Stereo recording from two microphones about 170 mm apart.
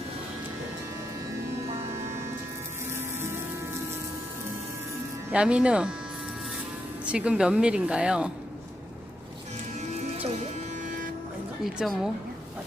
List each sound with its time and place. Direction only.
1.7 s vehicle: 40° right (ahead or behind)
5.3 s speech: 5° right (ahead or behind)
7.0 s speech: 5° right (ahead or behind)
11.6 s speech: centre (ahead or behind)